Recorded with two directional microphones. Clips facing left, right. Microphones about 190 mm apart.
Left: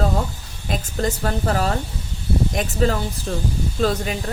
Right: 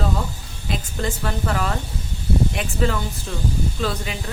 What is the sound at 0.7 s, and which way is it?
Speech, 40° left (ahead or behind).